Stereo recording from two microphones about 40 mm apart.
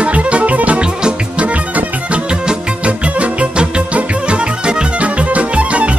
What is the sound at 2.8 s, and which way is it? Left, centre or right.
Music, right.